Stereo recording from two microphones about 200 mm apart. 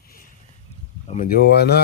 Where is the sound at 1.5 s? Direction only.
55° left (ahead or behind).